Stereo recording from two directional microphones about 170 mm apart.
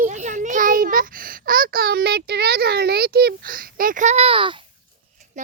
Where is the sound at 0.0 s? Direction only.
45° right (ahead or behind).